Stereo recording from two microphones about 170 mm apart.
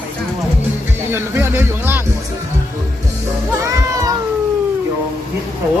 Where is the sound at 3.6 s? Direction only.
15° right (ahead or behind).